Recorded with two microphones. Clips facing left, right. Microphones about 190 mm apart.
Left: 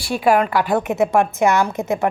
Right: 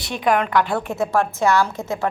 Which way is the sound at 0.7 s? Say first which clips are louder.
Left 4 dB; 20° left (ahead or behind).